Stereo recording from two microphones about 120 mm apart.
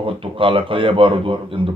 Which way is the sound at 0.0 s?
45° right (ahead or behind).